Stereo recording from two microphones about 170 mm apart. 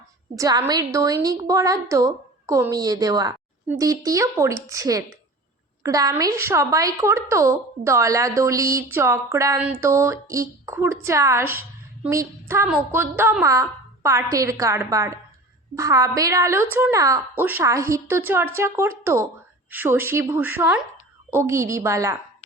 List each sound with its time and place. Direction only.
0.3 s a woman's voice: 20° right (ahead or behind)